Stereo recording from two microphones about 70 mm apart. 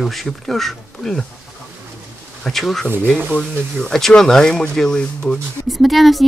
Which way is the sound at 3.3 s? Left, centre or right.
Centre.